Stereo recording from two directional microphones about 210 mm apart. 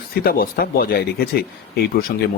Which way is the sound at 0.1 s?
45° left (ahead or behind).